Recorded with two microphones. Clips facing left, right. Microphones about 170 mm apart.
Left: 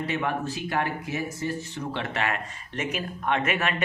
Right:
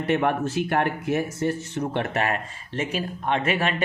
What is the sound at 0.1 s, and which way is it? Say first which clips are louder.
Speech: right 10 dB; 60° right (ahead or behind).